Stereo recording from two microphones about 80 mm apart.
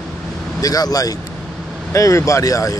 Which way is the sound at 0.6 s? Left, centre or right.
Left.